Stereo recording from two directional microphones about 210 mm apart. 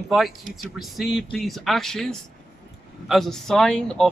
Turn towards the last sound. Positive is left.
turn(degrees=5)  # may be behind; listen again after turning